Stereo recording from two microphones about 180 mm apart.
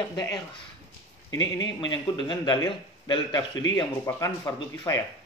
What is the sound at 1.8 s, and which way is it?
A man's voice, 25° left (ahead or behind).